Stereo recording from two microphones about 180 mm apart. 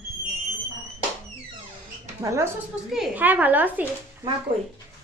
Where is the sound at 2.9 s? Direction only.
5° right (ahead or behind).